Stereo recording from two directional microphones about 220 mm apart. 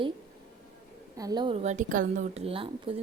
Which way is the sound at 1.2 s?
20° right (ahead or behind).